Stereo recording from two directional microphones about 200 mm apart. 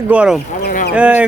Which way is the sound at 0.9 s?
5° right (ahead or behind).